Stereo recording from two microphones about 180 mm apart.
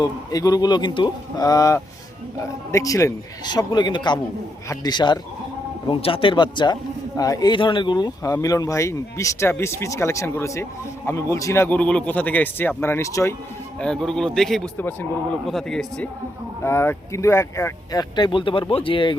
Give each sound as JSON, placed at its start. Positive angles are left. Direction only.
{"t": 0.0, "sound": "speech", "side_deg": 20}
{"t": 13.7, "sound": "a man's voice", "side_deg": 5}